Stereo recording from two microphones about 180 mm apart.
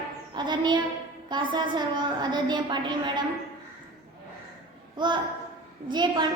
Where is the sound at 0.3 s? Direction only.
25° right (ahead or behind).